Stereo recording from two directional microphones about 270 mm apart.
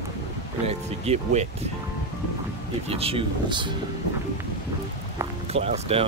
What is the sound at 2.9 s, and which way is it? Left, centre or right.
Speech, right.